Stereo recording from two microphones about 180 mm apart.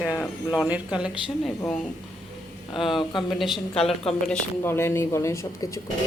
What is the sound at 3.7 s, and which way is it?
Speech, 35° left (ahead or behind).